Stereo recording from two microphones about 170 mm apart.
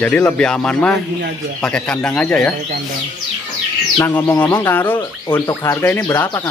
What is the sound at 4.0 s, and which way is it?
Speech, 15° left (ahead or behind).